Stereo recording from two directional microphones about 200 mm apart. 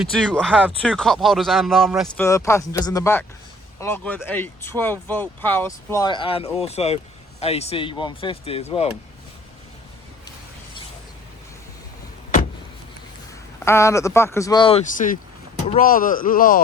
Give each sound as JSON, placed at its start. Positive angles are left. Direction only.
{"t": 0.0, "sound": "speech", "side_deg": 5}
{"t": 2.1, "sound": "speech", "side_deg": 15}
{"t": 13.7, "sound": "speech", "side_deg": 15}